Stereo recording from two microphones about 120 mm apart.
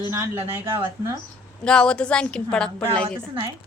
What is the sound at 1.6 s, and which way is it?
A woman's voice, 5° left (ahead or behind).